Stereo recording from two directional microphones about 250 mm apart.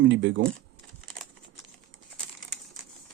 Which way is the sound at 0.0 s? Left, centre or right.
Right.